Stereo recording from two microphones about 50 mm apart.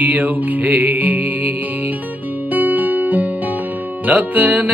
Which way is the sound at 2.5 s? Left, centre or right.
Right.